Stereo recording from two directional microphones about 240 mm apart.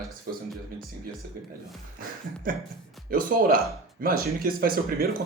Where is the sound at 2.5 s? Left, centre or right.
Right.